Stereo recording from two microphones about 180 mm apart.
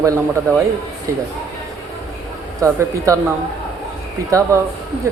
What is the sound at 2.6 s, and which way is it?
Speech, 15° right (ahead or behind).